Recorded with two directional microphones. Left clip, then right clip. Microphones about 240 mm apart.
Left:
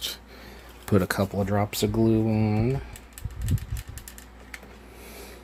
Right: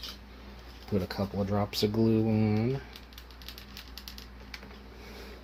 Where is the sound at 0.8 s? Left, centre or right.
Left; by 2.8 s centre.